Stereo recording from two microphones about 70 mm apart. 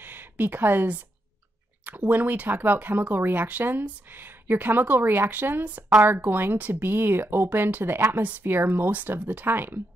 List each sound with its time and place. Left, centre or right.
0.0 s speech: right